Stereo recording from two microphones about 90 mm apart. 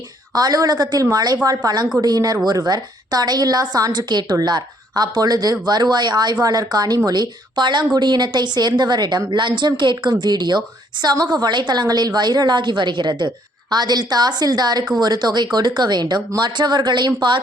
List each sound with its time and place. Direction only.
0.3 s a woman's voice: 45° right (ahead or behind); by 17.4 s 60° right (ahead or behind)